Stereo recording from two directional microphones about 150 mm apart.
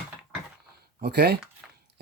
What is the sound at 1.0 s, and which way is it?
Speech, 90° right.